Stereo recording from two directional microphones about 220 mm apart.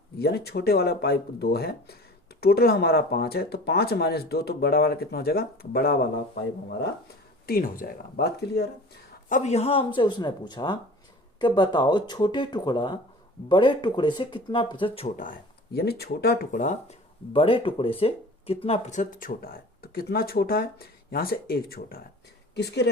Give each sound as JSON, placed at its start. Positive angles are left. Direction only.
{"t": 0.2, "sound": "speech", "side_deg": 45}
{"t": 7.4, "sound": "speech", "side_deg": 40}
{"t": 9.3, "sound": "speech", "side_deg": 30}
{"t": 15.1, "sound": "speech", "side_deg": 40}
{"t": 17.3, "sound": "speech", "side_deg": 25}